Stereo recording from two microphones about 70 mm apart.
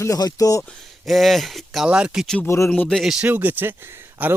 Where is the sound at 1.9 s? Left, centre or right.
Centre.